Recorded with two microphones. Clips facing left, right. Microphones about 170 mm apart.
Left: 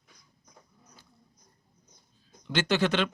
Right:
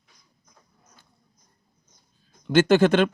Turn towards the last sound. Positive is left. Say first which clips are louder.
# right 9 dB
turn(degrees=-50)  # may be behind; listen again after turning